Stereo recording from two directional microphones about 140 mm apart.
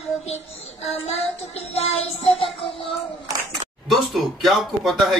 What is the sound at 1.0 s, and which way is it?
Music, 45° left (ahead or behind).